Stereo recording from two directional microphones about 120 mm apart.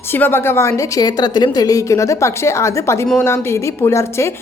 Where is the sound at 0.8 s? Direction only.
30° left (ahead or behind).